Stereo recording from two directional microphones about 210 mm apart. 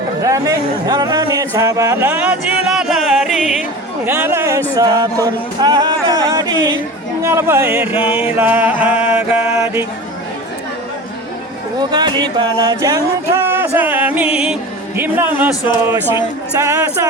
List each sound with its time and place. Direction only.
0.2 s speech: 15° right (ahead or behind)
2.6 s music: centre (ahead or behind)
4.0 s speech: 10° right (ahead or behind)
4.7 s a sound: 15° right (ahead or behind)
7.2 s speech: 15° right (ahead or behind)
7.9 s music: 25° left (ahead or behind)
8.4 s speech: 10° right (ahead or behind)
11.9 s a sound: 20° right (ahead or behind)
13.4 s music: 10° right (ahead or behind)
16.6 s speech: 15° right (ahead or behind)